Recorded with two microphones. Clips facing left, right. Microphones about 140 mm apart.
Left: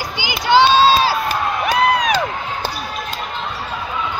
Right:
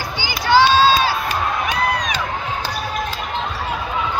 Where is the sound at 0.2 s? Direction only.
20° left (ahead or behind).